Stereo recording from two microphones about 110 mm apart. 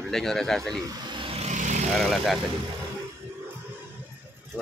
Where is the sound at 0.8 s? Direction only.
50° right (ahead or behind).